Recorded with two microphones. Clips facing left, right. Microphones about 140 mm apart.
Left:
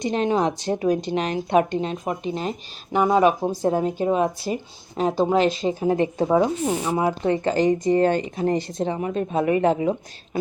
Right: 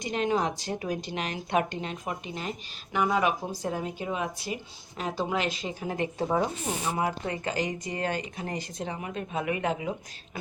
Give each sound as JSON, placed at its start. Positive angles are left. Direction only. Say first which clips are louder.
{"t": 0.0, "sound": "a woman's voice", "louder": "left 6 dB", "side_deg": 25}